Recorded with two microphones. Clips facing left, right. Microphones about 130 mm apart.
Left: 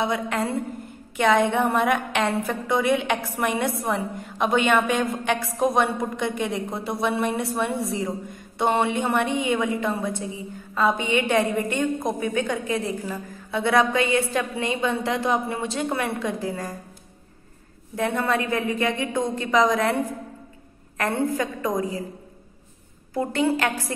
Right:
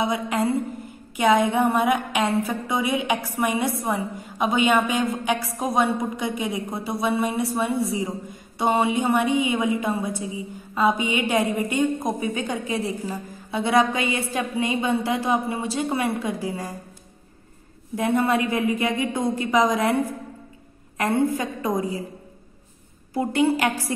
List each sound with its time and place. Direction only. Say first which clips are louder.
0.1 s a woman's voice: right 2 dB; 5° right (ahead or behind)
17.9 s a woman's voice: right 2 dB; 15° right (ahead or behind)
21.0 s a woman's voice: right 2 dB; 10° right (ahead or behind)
23.1 s a woman's voice: right 2 dB; 10° right (ahead or behind)